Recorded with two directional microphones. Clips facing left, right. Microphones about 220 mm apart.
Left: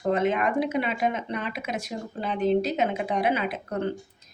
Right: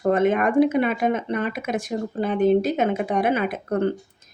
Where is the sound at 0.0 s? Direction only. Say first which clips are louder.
Right 5 dB; 50° right (ahead or behind).